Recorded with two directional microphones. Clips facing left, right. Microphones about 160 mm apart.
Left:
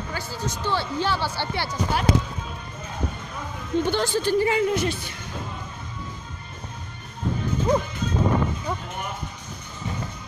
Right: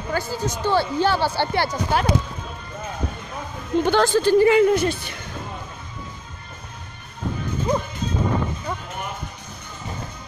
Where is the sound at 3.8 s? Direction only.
90° right; by 5.2 s 55° right (ahead or behind).